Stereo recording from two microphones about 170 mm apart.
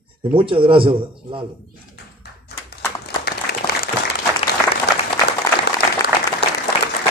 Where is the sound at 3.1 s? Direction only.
65° left (ahead or behind).